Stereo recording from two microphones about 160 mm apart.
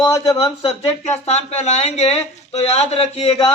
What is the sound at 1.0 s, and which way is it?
Speech, 45° left (ahead or behind).